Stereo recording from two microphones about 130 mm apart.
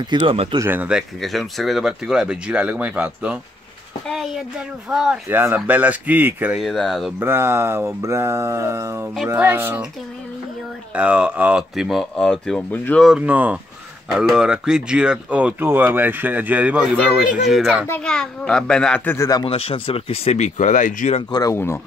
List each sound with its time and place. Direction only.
0.0 s speech: 40° right (ahead or behind)
0.6 s speech: 15° right (ahead or behind)
4.1 s speech: centre (ahead or behind)
5.3 s speech: 15° right (ahead or behind)
6.6 s speech: centre (ahead or behind)
7.2 s speech: 15° right (ahead or behind)
11.0 s speech: 10° right (ahead or behind); by 13.0 s 10° left (ahead or behind)
13.0 s speech: 10° right (ahead or behind); by 19.1 s 10° left (ahead or behind)
19.1 s speech: 25° left (ahead or behind)
19.4 s speech: 45° left (ahead or behind); by 21.2 s 70° left (ahead or behind)
21.3 s speech: 30° left (ahead or behind)